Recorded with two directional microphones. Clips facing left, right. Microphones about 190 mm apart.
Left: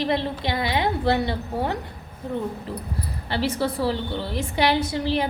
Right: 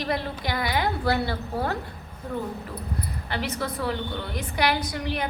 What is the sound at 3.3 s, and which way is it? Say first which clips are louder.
A woman's voice: left 6 dB; 30° left (ahead or behind).